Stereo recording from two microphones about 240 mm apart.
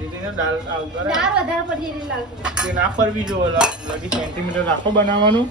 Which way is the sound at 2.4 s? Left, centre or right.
Centre.